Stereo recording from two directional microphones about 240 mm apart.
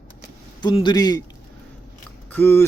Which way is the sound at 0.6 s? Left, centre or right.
Centre.